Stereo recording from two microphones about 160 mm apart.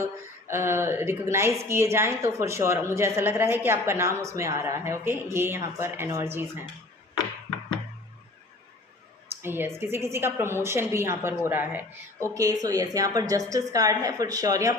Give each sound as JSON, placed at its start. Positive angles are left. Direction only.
{"t": 0.0, "sound": "a woman's voice", "side_deg": -15}
{"t": 9.3, "sound": "a woman's voice", "side_deg": -15}